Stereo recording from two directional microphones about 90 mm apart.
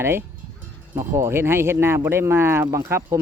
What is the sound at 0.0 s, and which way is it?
Speech, 25° right (ahead or behind).